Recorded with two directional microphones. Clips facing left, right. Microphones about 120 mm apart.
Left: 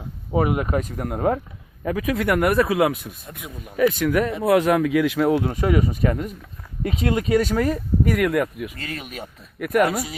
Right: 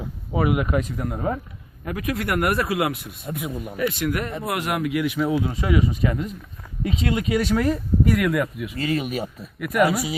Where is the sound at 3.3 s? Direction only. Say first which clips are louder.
Right 12 dB; 5° right (ahead or behind).